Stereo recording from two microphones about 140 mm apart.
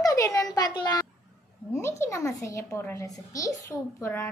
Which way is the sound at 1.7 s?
20° left (ahead or behind).